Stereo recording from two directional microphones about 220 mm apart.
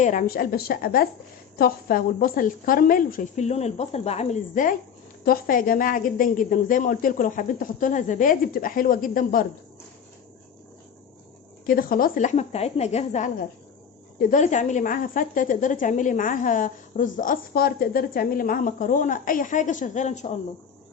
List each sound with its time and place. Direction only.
0.0 s a woman's voice: 35° left (ahead or behind)
11.6 s a woman's voice: 40° left (ahead or behind)